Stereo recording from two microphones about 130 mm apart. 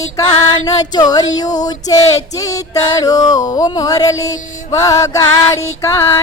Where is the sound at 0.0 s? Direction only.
30° left (ahead or behind).